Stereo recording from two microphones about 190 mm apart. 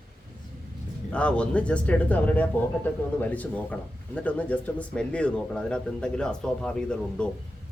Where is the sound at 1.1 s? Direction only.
5° left (ahead or behind).